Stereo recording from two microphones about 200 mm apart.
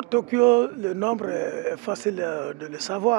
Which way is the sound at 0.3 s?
15° right (ahead or behind).